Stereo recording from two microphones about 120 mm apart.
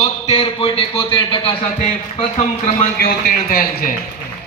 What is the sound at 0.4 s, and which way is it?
A man's voice, 50° left (ahead or behind).